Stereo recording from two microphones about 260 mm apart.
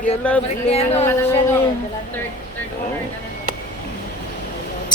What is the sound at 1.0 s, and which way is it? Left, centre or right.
Speech, centre.